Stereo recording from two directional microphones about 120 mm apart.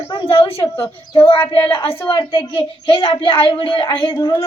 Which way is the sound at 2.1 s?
50° left (ahead or behind).